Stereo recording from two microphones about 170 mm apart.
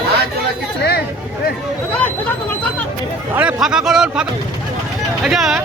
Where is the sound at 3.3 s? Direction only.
5° right (ahead or behind).